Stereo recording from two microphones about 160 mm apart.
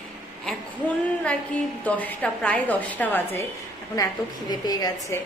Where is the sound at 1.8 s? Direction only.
10° left (ahead or behind).